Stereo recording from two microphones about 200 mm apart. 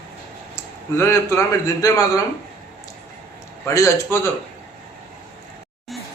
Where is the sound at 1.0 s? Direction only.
15° left (ahead or behind).